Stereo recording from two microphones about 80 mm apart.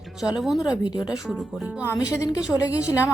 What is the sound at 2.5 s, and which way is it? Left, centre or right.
Speech, left.